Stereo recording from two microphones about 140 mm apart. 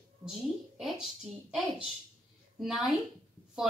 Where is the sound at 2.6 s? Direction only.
Centre (ahead or behind).